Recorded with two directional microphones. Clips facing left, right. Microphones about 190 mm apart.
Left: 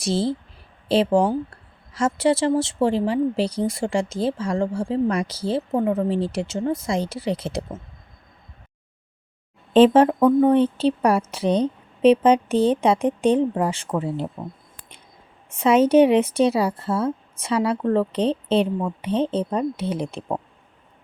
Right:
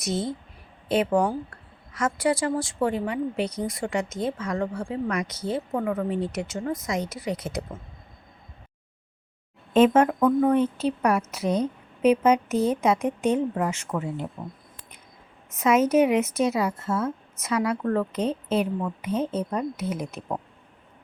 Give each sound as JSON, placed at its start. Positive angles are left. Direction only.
{"t": 0.0, "sound": "a woman's voice", "side_deg": 30}
{"t": 9.7, "sound": "a woman's voice", "side_deg": 30}
{"t": 15.4, "sound": "a woman's voice", "side_deg": 30}